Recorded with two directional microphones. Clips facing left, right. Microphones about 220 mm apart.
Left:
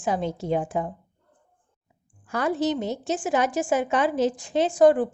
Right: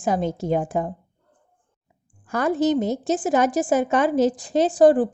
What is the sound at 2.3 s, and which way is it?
A woman's voice, 45° right (ahead or behind).